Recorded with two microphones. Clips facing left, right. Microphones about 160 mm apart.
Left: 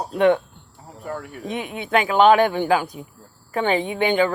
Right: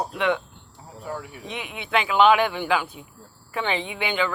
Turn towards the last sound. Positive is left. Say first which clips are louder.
# left 7 dB
turn(degrees=45)  # may be behind; listen again after turning